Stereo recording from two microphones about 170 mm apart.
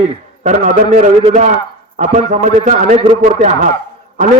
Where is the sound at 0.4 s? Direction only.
45° right (ahead or behind).